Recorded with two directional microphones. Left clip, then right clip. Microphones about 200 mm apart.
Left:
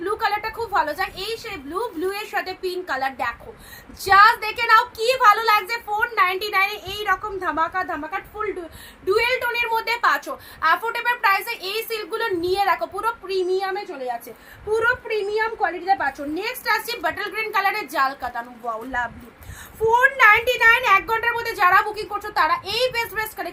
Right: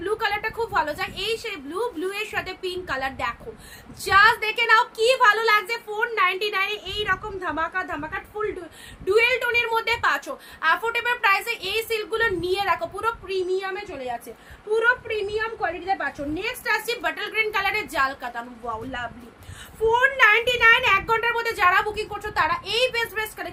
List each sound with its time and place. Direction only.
0.0 s a sound: 20° right (ahead or behind)
2.0 s a woman's voice: 20° right (ahead or behind)
9.0 s a woman's voice: 20° right (ahead or behind)
19.9 s a woman's voice: 15° right (ahead or behind)